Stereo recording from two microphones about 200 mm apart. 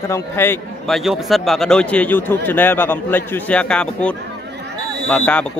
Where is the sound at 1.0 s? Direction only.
Centre (ahead or behind).